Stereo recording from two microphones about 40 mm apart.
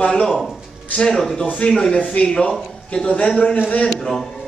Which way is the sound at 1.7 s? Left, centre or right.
Left.